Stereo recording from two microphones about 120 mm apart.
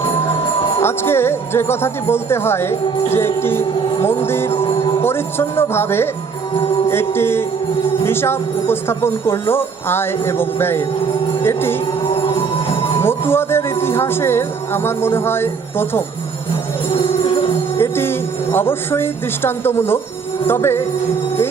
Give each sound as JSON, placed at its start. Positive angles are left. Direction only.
{"t": 0.8, "sound": "speech", "side_deg": 20}
{"t": 13.0, "sound": "speech", "side_deg": 20}
{"t": 16.9, "sound": "music", "side_deg": 45}
{"t": 17.7, "sound": "speech", "side_deg": 20}